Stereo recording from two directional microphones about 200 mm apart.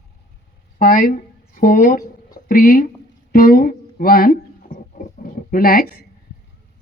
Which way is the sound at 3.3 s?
45° left (ahead or behind).